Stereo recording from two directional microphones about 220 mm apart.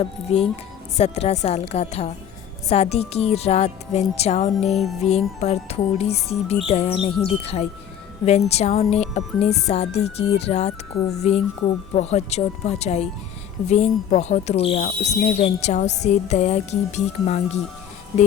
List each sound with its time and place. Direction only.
0.0 s speech: 25° left (ahead or behind)
4.6 s music: centre (ahead or behind)
5.0 s speech: 30° left (ahead or behind)